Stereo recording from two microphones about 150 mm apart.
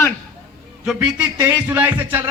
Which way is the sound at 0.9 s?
5° right (ahead or behind).